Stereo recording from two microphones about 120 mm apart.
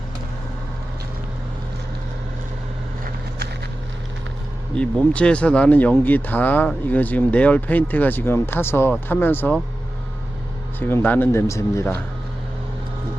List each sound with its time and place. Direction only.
4.7 s speech: 10° left (ahead or behind)
10.8 s speech: 15° left (ahead or behind)